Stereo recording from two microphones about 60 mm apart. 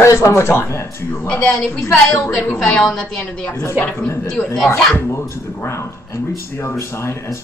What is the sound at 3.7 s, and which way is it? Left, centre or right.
Speech, left.